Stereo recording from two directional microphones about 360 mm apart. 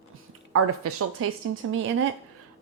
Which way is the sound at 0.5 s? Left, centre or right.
Right.